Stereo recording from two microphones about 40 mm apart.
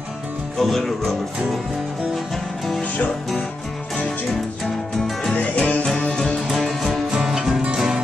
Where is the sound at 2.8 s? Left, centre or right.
Left.